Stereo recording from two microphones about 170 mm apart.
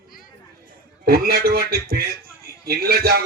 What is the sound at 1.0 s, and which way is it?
A man's voice, 65° right (ahead or behind).